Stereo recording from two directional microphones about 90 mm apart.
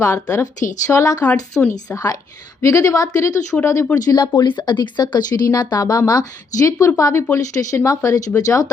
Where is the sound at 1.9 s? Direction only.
40° left (ahead or behind).